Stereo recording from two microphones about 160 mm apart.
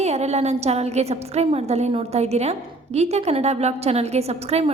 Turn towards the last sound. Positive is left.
turn(degrees=-40)  # may be behind; listen again after turning